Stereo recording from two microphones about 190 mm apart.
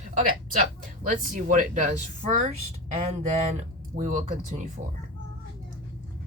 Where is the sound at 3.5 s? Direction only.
40° right (ahead or behind).